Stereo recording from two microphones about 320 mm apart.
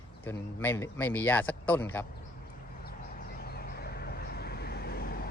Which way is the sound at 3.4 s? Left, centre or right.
Left.